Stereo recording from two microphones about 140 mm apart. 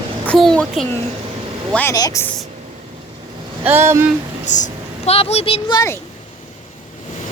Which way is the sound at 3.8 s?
20° right (ahead or behind).